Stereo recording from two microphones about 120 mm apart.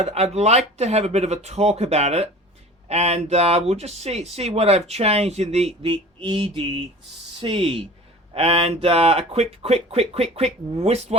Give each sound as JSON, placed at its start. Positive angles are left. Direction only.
{"t": 0.0, "sound": "speech", "side_deg": -60}
{"t": 5.8, "sound": "mantra", "side_deg": -45}
{"t": 8.3, "sound": "speech", "side_deg": -50}